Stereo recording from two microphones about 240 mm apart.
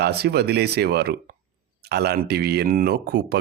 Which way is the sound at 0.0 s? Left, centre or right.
Right.